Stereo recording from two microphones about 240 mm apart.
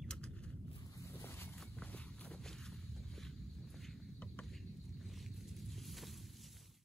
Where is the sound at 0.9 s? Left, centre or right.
Centre.